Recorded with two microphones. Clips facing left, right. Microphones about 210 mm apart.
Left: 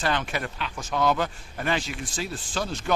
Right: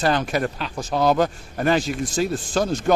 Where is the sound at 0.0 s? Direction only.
40° right (ahead or behind).